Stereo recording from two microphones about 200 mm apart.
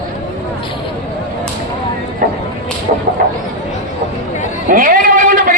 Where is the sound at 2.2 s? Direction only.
45° right (ahead or behind).